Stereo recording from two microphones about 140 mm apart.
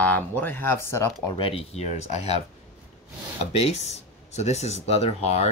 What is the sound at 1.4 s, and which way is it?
Speech, 40° left (ahead or behind).